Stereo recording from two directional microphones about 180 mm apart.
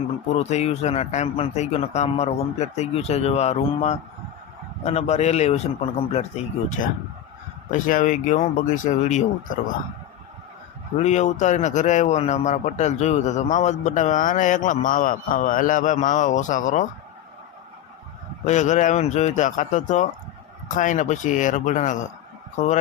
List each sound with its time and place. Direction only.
0.3 s a man's voice: 40° left (ahead or behind)
11.0 s a man's voice: 40° left (ahead or behind)
18.4 s a man's voice: 40° left (ahead or behind)